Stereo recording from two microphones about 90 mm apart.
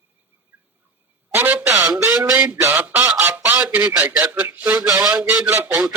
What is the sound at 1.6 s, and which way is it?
Speech, 35° right (ahead or behind).